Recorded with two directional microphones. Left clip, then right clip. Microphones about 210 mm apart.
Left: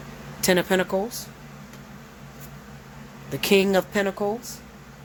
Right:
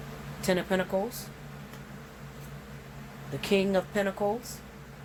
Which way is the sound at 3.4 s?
55° left (ahead or behind).